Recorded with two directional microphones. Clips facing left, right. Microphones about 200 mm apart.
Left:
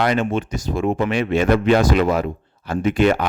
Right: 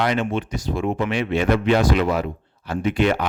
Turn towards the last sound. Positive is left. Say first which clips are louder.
# left 3 dB
turn(degrees=45)  # may be behind; listen again after turning